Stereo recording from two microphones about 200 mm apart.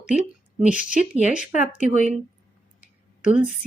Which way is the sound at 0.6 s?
5° right (ahead or behind).